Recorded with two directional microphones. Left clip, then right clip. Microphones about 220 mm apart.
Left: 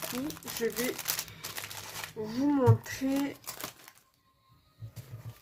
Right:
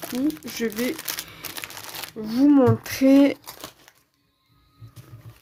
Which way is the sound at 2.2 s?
50° right (ahead or behind).